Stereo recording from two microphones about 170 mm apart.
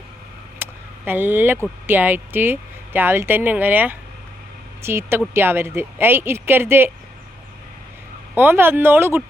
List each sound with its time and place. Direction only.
0.6 s a sound: 10° right (ahead or behind)
1.9 s speech: 10° right (ahead or behind)
8.4 s speech: 10° right (ahead or behind)